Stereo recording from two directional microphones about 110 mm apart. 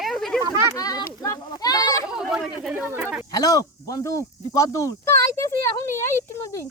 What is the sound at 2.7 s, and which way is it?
Speech, 15° right (ahead or behind).